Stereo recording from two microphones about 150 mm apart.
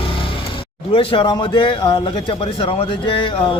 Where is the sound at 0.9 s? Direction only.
35° left (ahead or behind).